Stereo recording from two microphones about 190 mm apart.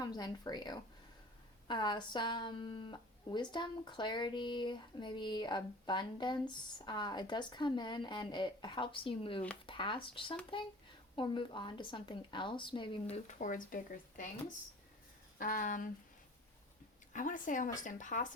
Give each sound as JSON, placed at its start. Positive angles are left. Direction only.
{"t": 0.0, "sound": "a sound", "side_deg": 20}
{"t": 13.2, "sound": "speech", "side_deg": 40}
{"t": 15.4, "sound": "speech", "side_deg": 45}
{"t": 17.1, "sound": "speech", "side_deg": 45}